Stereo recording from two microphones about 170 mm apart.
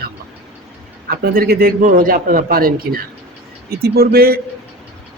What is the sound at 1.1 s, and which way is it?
A man's voice, 60° right (ahead or behind).